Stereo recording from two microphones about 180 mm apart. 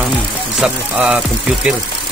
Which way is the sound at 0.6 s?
5° right (ahead or behind).